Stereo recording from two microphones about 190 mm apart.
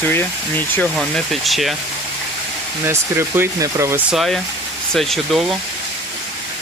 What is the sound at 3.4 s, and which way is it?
Speech, 15° right (ahead or behind).